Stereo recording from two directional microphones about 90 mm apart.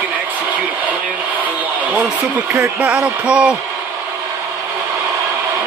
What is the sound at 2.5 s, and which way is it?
Speech, 15° right (ahead or behind).